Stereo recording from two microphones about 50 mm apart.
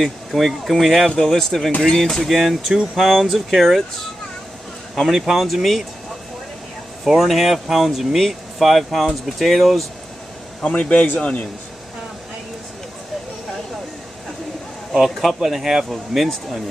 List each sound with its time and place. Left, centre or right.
0.0 s speech: centre
4.9 s speech: centre
7.1 s speech: centre
10.6 s a man's voice: left
15.0 s speech: centre